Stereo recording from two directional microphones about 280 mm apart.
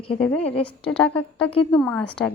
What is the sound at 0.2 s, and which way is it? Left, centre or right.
A woman's voice, centre.